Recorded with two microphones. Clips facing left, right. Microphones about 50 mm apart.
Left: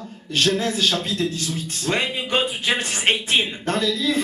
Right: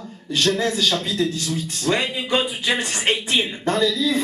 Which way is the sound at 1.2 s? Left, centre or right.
Left.